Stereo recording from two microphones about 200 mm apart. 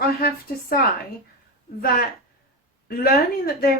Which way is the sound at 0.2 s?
50° left (ahead or behind).